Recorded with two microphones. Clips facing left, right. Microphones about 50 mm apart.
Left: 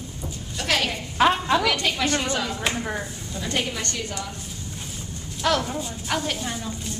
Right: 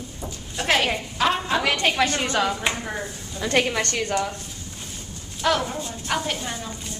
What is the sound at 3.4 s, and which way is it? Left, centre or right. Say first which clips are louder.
Speech: right 6 dB; right.